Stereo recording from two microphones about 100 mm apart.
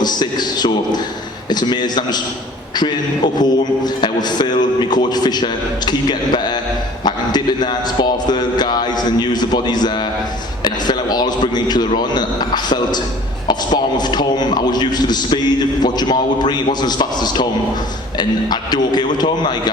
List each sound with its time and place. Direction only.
0.0 s a man's voice: 45° left (ahead or behind)
3.3 s a man's voice: 45° left (ahead or behind)